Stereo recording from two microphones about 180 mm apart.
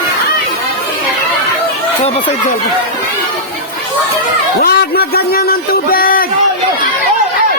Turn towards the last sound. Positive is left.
turn(degrees=55)  # may be behind; listen again after turning